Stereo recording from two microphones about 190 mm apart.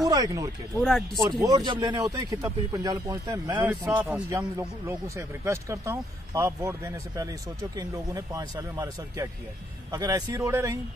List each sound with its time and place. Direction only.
0.0 s speech: 20° right (ahead or behind)
0.8 s speech: centre (ahead or behind)
1.4 s speech: 20° right (ahead or behind)